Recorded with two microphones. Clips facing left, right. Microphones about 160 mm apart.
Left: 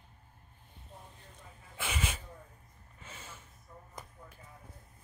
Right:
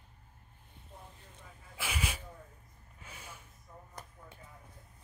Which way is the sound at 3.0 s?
10° right (ahead or behind).